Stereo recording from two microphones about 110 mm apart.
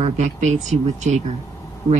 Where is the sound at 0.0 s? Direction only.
90° right.